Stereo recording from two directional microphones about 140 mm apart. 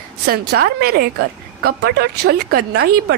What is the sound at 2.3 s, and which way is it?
Speech, 90° right.